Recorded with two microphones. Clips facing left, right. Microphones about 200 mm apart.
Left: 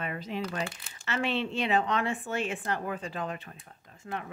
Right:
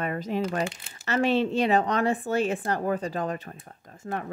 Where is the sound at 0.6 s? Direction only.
25° right (ahead or behind).